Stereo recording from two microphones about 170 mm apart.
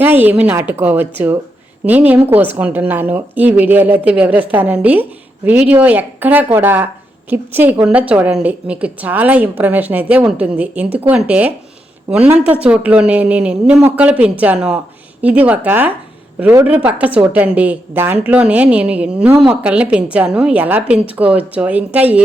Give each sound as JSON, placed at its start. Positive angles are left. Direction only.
{"t": 0.0, "sound": "a woman's voice", "side_deg": -10}